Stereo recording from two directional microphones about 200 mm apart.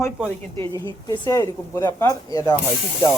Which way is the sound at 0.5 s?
25° right (ahead or behind).